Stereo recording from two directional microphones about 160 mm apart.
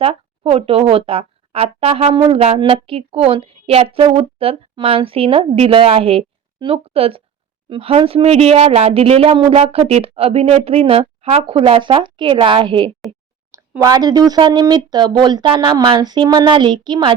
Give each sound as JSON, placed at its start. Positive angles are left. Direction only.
{"t": 0.0, "sound": "speech", "side_deg": -40}